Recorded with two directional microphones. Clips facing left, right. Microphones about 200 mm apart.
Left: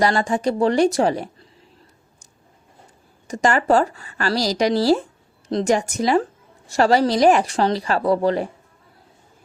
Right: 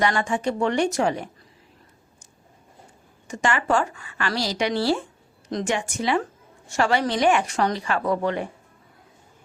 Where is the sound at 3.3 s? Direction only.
40° left (ahead or behind).